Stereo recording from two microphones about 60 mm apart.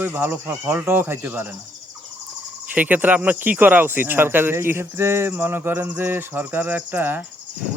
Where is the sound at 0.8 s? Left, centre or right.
Right.